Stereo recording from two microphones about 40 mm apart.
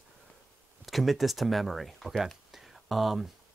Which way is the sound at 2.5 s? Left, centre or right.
Centre.